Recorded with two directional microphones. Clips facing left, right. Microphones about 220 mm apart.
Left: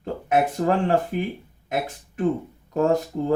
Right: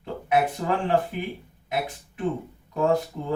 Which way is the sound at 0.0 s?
45° left (ahead or behind).